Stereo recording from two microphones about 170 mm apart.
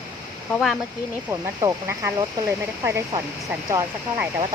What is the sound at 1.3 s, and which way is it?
Speech, 15° right (ahead or behind).